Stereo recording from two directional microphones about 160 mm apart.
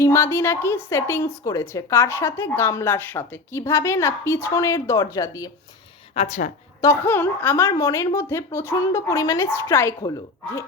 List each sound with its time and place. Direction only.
0.0 s a woman's voice: 15° left (ahead or behind)
6.1 s speech: 45° left (ahead or behind)
6.8 s a woman's voice: 15° left (ahead or behind)